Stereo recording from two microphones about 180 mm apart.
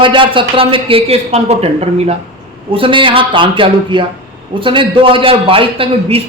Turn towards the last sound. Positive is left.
turn(degrees=-30)  # may be behind; listen again after turning